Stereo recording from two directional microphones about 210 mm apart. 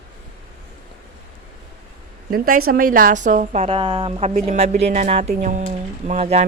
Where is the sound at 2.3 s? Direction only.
45° right (ahead or behind).